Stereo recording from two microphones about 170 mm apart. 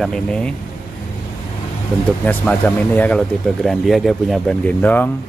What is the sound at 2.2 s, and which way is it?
A man's voice, 10° left (ahead or behind).